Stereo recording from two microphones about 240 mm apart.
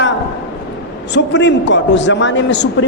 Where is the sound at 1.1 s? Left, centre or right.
Left.